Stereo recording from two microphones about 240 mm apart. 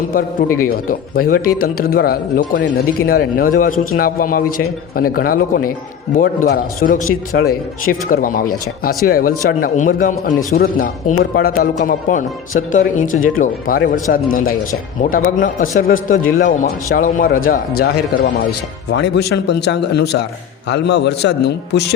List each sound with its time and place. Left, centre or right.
0.1 s speech: left